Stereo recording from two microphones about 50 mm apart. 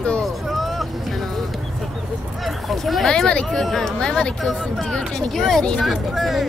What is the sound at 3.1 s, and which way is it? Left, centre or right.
Speech, centre.